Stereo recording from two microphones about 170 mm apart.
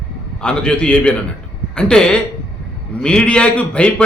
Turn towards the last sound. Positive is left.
turn(degrees=5)  # may be behind; listen again after turning